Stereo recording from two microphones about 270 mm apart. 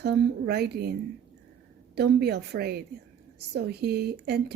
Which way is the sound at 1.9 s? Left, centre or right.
Right.